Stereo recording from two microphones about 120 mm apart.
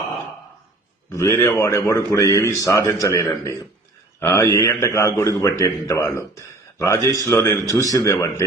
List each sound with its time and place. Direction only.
1.1 s a man's voice: 25° left (ahead or behind)